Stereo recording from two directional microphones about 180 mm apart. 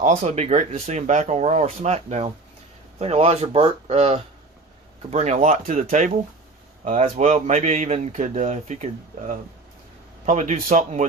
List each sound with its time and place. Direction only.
0.0 s a man's voice: 40° right (ahead or behind)